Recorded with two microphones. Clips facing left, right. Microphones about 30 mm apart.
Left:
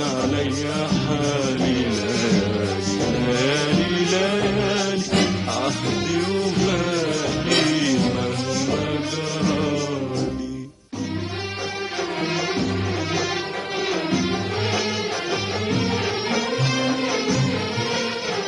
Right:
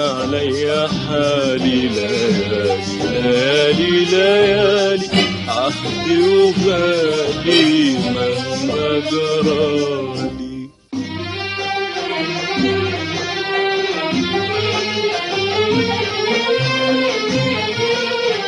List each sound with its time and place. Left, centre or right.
1.2 s music: right
2.1 s music: right
3.2 s music: right
4.3 s music: right
5.1 s music: right
6.8 s music: right
8.9 s music: right
16.3 s music: right